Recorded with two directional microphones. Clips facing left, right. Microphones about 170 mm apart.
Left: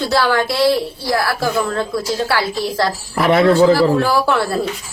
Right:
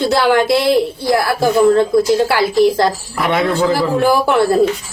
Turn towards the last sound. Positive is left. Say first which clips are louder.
# right 4 dB
turn(degrees=-20)  # may be behind; listen again after turning